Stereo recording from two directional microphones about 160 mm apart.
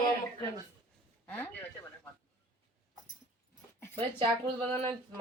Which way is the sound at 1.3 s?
10° left (ahead or behind).